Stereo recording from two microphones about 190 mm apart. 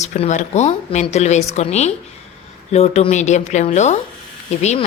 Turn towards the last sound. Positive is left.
turn(degrees=35)  # may be behind; listen again after turning